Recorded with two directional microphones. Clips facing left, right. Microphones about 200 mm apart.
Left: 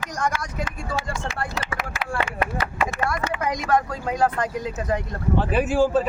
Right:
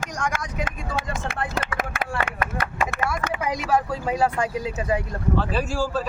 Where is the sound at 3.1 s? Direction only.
5° right (ahead or behind).